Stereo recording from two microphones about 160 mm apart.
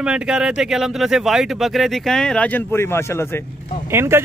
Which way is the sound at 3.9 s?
15° right (ahead or behind).